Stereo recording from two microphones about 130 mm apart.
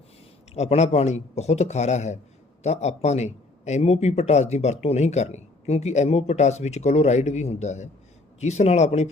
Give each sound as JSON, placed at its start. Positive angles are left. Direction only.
{"t": 0.5, "sound": "a man's voice", "side_deg": 60}